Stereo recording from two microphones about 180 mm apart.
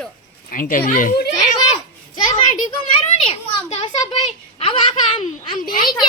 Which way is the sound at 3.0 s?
30° left (ahead or behind).